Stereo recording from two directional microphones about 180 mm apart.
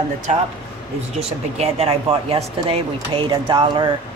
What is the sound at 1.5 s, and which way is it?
Speech, 35° right (ahead or behind).